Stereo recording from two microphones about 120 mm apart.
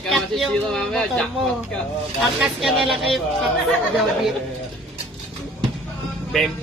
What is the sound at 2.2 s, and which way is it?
A man's voice, centre (ahead or behind).